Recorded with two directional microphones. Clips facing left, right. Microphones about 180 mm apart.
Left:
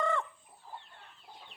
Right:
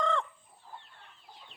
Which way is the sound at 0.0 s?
5° left (ahead or behind).